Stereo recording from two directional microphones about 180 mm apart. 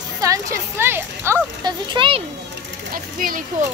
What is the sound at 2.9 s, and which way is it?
Speech, 50° right (ahead or behind).